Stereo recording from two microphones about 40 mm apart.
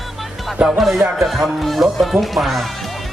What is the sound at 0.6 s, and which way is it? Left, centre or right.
Speech, right.